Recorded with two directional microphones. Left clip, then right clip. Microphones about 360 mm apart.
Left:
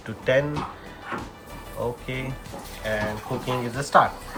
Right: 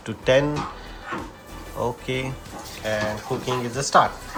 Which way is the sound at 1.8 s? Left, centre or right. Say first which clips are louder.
Right 3 dB; centre.